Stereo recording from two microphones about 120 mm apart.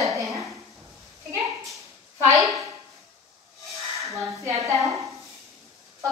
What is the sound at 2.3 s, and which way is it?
Speech, 25° right (ahead or behind).